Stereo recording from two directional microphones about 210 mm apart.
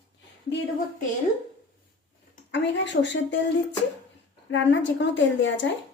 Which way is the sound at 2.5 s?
60° left (ahead or behind).